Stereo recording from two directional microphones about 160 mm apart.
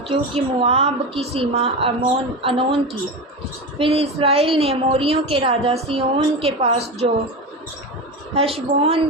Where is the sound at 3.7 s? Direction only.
35° right (ahead or behind).